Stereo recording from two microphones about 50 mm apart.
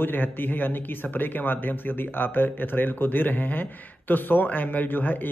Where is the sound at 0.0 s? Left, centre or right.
Left.